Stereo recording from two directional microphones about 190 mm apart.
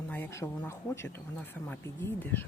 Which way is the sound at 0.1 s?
10° left (ahead or behind).